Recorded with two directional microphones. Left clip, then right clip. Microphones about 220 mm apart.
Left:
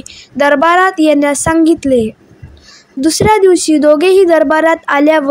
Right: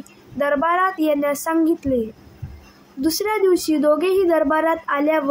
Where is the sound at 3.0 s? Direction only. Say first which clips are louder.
Left 11 dB; 35° left (ahead or behind).